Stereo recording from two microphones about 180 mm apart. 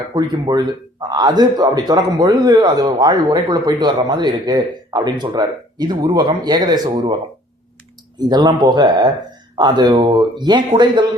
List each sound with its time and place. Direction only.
0.1 s speech: 20° right (ahead or behind)
8.2 s speech: 25° right (ahead or behind)